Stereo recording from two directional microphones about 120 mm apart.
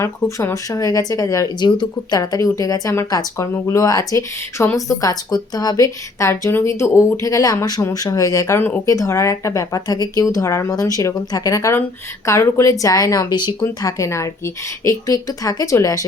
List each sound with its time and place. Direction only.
0.0 s speech: 25° left (ahead or behind)
14.0 s speech: 25° left (ahead or behind)